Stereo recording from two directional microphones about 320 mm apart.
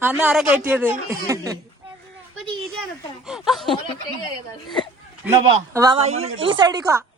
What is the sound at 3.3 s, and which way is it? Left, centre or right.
Speech, centre.